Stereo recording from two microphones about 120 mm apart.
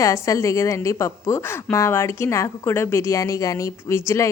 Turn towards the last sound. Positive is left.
turn(degrees=25)  # may be behind; listen again after turning